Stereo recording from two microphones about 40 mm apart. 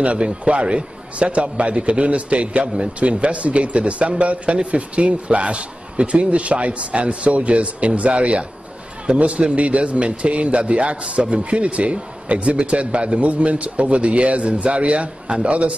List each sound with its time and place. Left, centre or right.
0.0 s a man's voice: right